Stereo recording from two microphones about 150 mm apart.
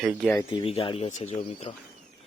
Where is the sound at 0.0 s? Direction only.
Centre (ahead or behind).